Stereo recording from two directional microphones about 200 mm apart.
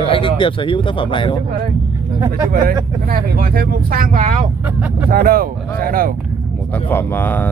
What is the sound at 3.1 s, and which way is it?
Speech, 45° right (ahead or behind).